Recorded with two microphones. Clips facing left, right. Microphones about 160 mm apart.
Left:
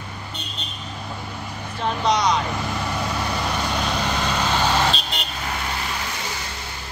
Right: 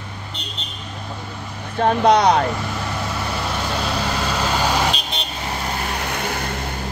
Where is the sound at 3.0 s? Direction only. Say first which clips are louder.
Even; centre (ahead or behind).